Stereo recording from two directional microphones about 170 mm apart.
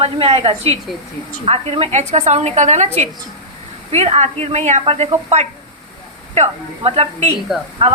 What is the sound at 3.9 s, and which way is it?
A woman's voice, 40° right (ahead or behind).